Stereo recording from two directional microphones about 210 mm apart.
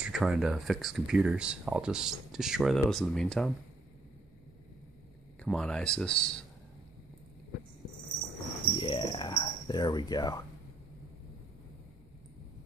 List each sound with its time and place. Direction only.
0.0 s speech: 5° right (ahead or behind)
5.4 s speech: 5° left (ahead or behind)
8.7 s a sound: 25° left (ahead or behind)